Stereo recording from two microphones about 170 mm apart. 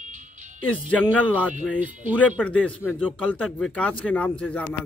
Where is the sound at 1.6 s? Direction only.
10° right (ahead or behind).